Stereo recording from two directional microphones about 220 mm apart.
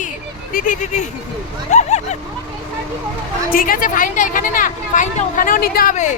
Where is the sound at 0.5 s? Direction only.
35° left (ahead or behind).